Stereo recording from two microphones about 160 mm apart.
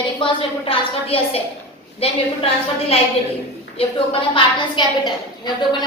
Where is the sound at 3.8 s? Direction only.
35° left (ahead or behind).